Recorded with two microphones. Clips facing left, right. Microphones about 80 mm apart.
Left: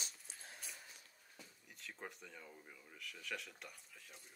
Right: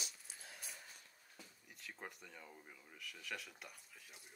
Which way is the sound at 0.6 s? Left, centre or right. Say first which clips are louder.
Right 1 dB; centre.